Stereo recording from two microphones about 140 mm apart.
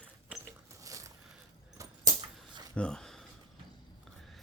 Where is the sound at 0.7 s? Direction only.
25° right (ahead or behind).